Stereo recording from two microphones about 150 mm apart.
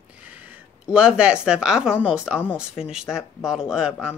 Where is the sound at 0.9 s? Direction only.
5° right (ahead or behind).